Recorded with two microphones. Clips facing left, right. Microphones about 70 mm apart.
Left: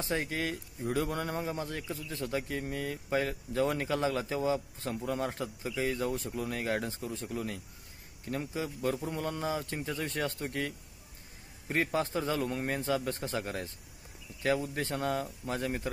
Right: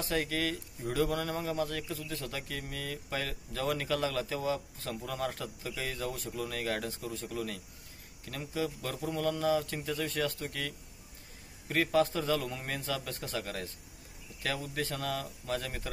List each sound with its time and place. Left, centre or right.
0.0 s speech: left